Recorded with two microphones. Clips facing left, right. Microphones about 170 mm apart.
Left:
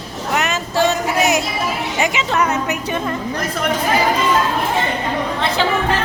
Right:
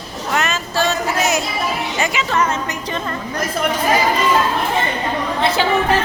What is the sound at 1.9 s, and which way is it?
A woman's voice, 20° left (ahead or behind).